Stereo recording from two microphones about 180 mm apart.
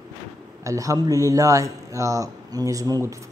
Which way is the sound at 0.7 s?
20° right (ahead or behind).